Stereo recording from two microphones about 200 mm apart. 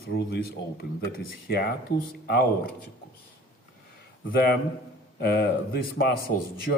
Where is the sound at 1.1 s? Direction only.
55° left (ahead or behind).